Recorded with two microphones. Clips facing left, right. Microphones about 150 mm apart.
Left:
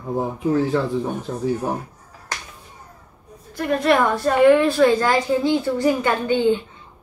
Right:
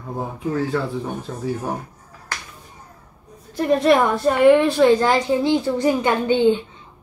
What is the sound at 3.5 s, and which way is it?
A woman's voice, 20° right (ahead or behind).